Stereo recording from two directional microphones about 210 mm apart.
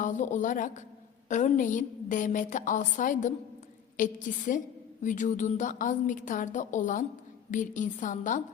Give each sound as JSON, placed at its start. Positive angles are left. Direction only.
{"t": 0.0, "sound": "a woman's voice", "side_deg": 35}